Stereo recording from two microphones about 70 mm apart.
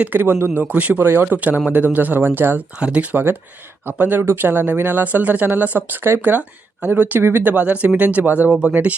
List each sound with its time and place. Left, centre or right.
0.0 s speech: right
2.7 s speech: centre
7.5 s speech: centre